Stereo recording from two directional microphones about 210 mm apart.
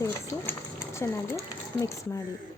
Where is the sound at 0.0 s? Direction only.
10° left (ahead or behind).